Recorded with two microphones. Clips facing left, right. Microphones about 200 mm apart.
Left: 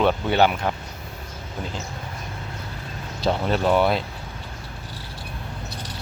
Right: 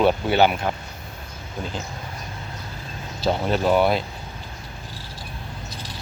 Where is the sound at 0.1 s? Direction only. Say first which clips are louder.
Right 1 dB; 5° right (ahead or behind).